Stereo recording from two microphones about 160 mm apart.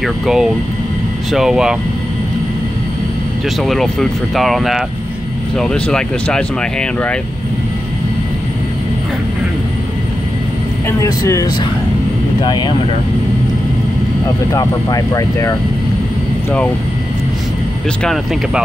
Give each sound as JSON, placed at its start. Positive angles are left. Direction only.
{"t": 0.0, "sound": "speech", "side_deg": -5}
{"t": 3.6, "sound": "speech", "side_deg": 0}
{"t": 10.9, "sound": "speech", "side_deg": 20}
{"t": 14.2, "sound": "speech", "side_deg": 25}
{"t": 18.0, "sound": "speech", "side_deg": 0}